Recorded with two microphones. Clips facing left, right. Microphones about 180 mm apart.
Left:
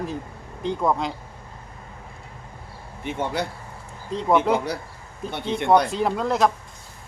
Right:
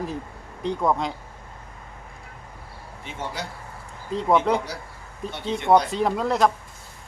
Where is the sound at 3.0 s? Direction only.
60° left (ahead or behind).